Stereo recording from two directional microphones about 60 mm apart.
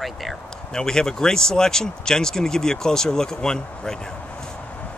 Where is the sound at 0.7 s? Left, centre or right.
Centre.